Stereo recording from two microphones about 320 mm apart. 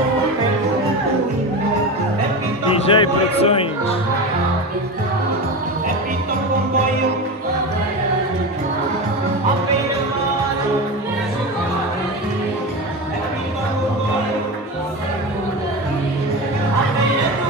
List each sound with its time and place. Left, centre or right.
2.9 s speech: centre